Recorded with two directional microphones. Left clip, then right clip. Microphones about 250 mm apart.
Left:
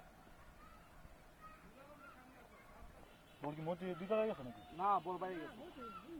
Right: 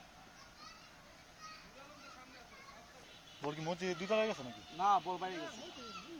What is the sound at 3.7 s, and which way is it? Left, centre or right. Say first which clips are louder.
Speech: right 4 dB; right.